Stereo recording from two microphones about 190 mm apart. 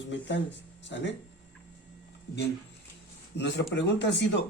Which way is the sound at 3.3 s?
65° left (ahead or behind).